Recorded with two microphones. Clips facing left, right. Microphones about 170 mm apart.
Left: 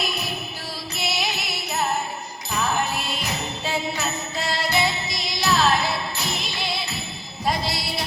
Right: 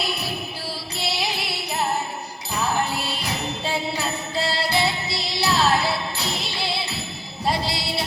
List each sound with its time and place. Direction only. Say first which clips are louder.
0.9 s music: even; 30° right (ahead or behind)
3.0 s music: right 1 dB; 30° right (ahead or behind)